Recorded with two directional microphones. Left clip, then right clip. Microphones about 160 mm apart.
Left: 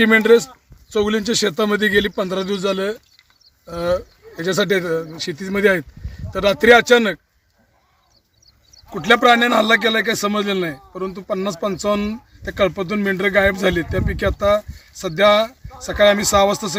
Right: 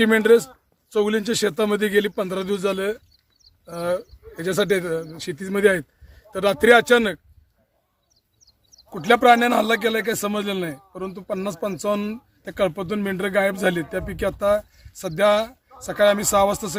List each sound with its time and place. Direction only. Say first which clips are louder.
0.0 s a man's voice: left 3 dB; 5° right (ahead or behind)
8.9 s a man's voice: left 2 dB; 10° right (ahead or behind)